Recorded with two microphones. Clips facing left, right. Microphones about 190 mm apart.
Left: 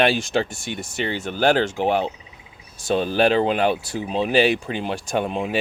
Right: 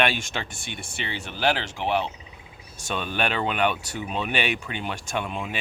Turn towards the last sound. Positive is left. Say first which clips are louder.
# left 7 dB
turn(degrees=35)  # may be behind; listen again after turning